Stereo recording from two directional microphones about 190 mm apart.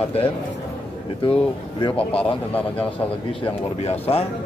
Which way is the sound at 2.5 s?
10° left (ahead or behind).